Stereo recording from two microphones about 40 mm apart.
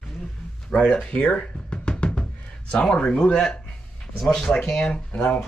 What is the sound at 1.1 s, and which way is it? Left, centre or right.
Speech, left.